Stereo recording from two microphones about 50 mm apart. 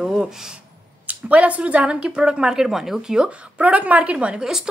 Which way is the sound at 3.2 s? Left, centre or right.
Right.